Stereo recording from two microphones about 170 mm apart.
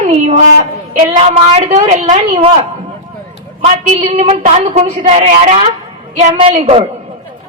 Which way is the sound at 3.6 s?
35° right (ahead or behind).